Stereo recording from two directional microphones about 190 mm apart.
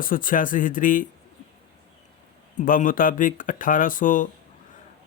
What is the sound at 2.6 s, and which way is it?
A man's voice, 45° left (ahead or behind).